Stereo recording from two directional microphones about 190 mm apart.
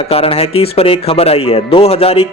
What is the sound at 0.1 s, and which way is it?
Speech, 30° left (ahead or behind).